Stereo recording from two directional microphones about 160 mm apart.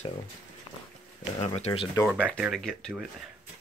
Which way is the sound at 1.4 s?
40° left (ahead or behind).